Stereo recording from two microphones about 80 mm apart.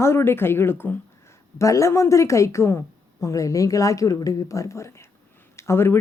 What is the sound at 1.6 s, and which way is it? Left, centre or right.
Speech, left.